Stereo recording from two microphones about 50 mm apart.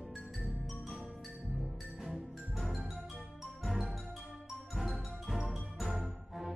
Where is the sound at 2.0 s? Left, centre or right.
Centre.